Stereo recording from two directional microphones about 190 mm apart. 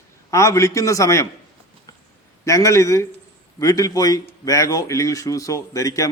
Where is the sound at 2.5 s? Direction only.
15° left (ahead or behind).